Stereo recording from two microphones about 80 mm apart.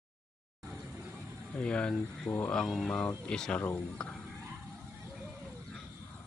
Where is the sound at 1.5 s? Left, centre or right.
Centre.